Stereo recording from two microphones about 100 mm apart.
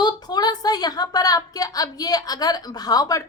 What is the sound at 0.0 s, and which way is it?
A woman's voice, 45° left (ahead or behind).